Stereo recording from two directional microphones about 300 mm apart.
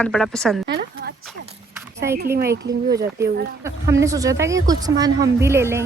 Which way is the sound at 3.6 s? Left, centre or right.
Centre.